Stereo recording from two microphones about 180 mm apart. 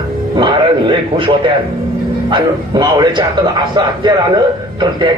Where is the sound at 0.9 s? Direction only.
30° right (ahead or behind).